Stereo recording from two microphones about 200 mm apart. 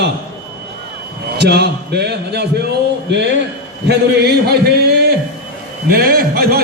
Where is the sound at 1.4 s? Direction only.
55° right (ahead or behind).